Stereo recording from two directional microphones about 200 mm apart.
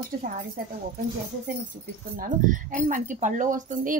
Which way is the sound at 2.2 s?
40° right (ahead or behind).